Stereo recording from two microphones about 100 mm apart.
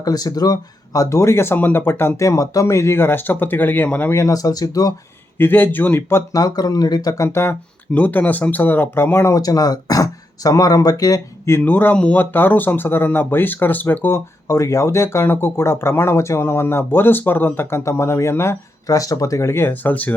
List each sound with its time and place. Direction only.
0.0 s speech: 40° left (ahead or behind); by 4.2 s 20° left (ahead or behind)
4.2 s speech: 35° left (ahead or behind)
5.4 s speech: 20° left (ahead or behind)
6.3 s speech: 40° left (ahead or behind)
7.9 s speech: 15° left (ahead or behind)
9.3 s speech: 40° left (ahead or behind)
11.5 s speech: 20° left (ahead or behind)